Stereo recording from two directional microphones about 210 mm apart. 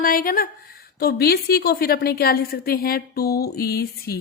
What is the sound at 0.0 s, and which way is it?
A woman's voice, 40° left (ahead or behind).